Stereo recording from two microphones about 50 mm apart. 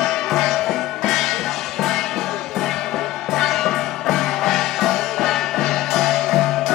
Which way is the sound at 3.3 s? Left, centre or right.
Centre.